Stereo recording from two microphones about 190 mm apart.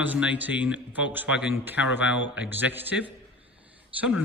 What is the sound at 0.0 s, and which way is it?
A man's voice, 10° right (ahead or behind).